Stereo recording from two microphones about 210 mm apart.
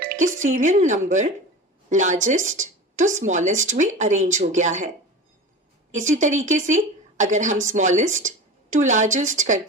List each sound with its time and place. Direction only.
0.0 s a woman's voice: 40° right (ahead or behind)
6.0 s speech: 35° right (ahead or behind)